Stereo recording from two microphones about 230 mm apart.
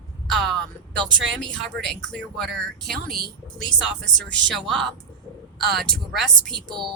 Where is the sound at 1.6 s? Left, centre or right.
Centre.